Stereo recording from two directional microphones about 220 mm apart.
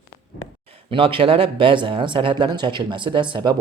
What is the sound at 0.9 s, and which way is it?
Speech, 25° right (ahead or behind).